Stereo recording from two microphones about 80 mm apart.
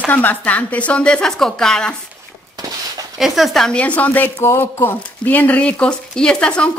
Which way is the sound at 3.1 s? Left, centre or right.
Centre.